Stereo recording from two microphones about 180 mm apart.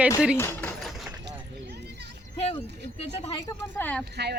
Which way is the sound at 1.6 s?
65° right (ahead or behind).